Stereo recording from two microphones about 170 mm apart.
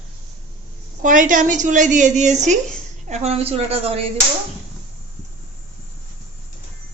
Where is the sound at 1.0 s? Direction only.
50° right (ahead or behind); by 4.1 s 35° right (ahead or behind).